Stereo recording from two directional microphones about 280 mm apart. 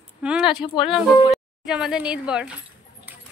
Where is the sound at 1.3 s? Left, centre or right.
Centre.